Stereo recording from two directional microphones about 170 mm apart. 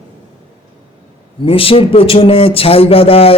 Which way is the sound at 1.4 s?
35° left (ahead or behind).